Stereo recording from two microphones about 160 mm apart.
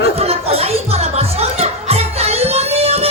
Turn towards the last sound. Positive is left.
turn(degrees=-40)  # may be behind; listen again after turning